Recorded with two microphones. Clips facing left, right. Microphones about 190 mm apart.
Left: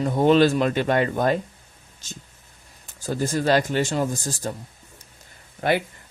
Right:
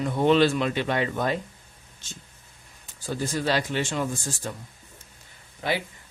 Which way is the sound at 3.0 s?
45° left (ahead or behind).